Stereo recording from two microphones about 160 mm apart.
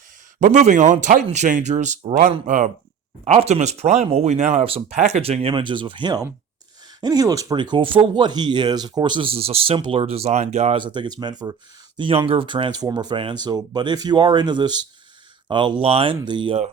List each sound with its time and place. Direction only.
0.3 s speech: 50° right (ahead or behind)
10.8 s speech: 30° right (ahead or behind)